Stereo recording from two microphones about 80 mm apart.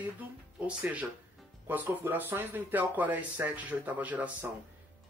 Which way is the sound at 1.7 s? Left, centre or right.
Right.